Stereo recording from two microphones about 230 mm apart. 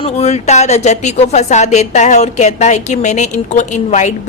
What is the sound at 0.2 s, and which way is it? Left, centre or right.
A woman's voice, left.